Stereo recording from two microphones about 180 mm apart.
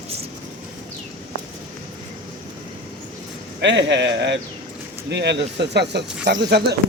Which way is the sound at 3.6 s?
75° right (ahead or behind).